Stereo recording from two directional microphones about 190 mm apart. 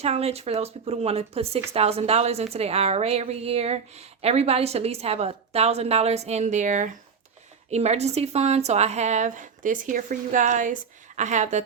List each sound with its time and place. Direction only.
0.0 s speech: 35° right (ahead or behind)